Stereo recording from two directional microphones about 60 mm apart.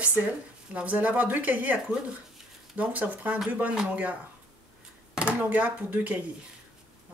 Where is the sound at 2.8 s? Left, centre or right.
Right.